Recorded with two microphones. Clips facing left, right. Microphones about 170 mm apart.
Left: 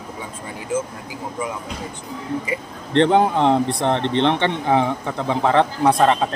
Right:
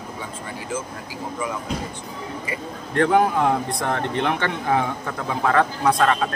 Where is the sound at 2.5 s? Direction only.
25° left (ahead or behind).